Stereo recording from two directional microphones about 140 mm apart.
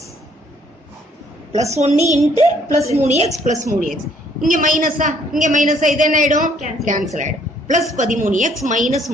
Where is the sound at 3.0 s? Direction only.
55° right (ahead or behind).